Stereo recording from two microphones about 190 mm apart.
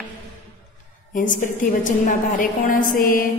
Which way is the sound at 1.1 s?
45° left (ahead or behind).